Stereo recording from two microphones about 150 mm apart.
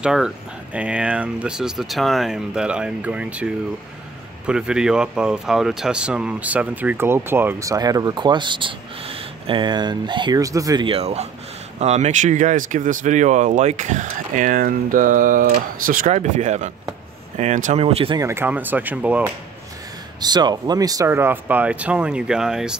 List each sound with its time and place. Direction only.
0.0 s speech: 5° right (ahead or behind); by 10.9 s 25° right (ahead or behind)
10.9 s speech: 45° right (ahead or behind); by 16.1 s 70° right (ahead or behind)
16.1 s speech: 50° right (ahead or behind)
18.1 s speech: 20° right (ahead or behind)
20.2 s speech: 30° right (ahead or behind); by 22.8 s 5° right (ahead or behind)